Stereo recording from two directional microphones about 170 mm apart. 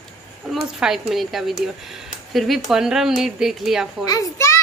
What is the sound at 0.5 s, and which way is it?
Speech, centre (ahead or behind).